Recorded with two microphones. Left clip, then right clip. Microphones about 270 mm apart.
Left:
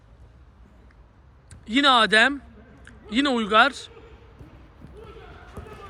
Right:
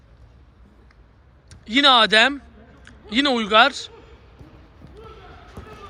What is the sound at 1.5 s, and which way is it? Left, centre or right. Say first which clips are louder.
A man's voice: right 3 dB; centre.